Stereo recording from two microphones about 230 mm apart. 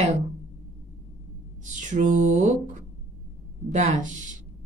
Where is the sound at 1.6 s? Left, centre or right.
Right.